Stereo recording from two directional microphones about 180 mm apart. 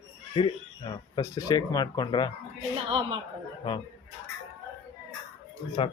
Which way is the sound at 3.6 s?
30° left (ahead or behind).